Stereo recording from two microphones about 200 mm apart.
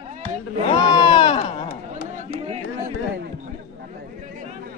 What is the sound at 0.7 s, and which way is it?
Speech, 25° left (ahead or behind).